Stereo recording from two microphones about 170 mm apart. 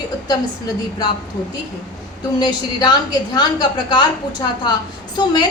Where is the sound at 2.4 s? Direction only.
25° left (ahead or behind).